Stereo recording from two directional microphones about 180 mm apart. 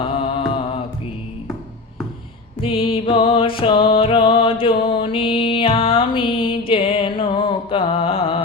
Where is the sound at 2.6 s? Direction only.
30° left (ahead or behind).